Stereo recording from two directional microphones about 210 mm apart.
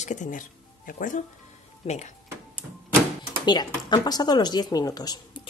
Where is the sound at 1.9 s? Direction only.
30° left (ahead or behind).